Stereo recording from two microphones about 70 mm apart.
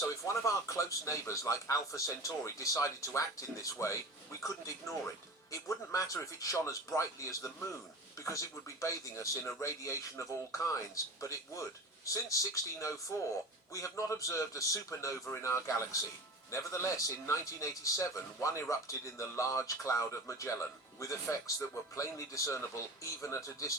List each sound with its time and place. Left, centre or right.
0.0 s speech: left